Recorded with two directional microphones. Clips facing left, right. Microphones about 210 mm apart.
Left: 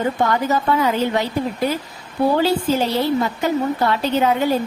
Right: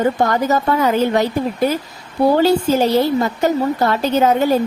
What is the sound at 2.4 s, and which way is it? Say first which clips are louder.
Speech: right 4 dB; 45° right (ahead or behind).